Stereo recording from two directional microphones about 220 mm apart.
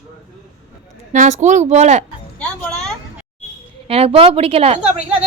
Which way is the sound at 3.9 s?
25° right (ahead or behind).